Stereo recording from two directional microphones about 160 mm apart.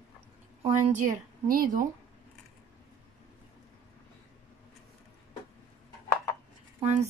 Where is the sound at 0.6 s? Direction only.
50° right (ahead or behind).